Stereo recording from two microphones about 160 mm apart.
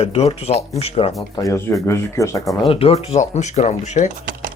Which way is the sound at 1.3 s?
20° left (ahead or behind).